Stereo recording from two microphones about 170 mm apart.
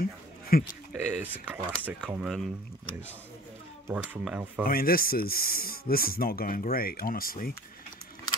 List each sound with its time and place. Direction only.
0.5 s speech: 60° left (ahead or behind)
0.9 s speech: 10° right (ahead or behind)
3.8 s speech: 10° right (ahead or behind)
4.6 s speech: 60° left (ahead or behind)